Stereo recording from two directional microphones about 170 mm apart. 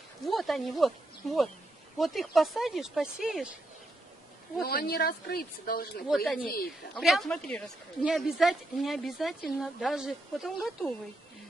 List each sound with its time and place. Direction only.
0.2 s a woman's voice: centre (ahead or behind)
4.6 s speech: 65° left (ahead or behind)
6.0 s a woman's voice: centre (ahead or behind)
6.4 s speech: 60° left (ahead or behind)
7.0 s a woman's voice: centre (ahead or behind)